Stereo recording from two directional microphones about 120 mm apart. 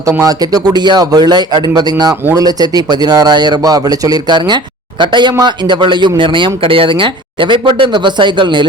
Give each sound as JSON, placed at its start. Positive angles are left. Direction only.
{"t": 0.2, "sound": "a man's voice", "side_deg": -30}